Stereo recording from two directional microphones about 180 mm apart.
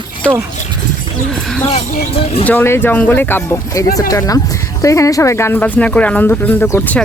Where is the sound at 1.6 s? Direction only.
45° left (ahead or behind).